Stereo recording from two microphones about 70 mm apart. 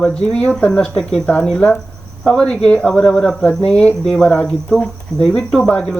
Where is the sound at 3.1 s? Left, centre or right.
Centre.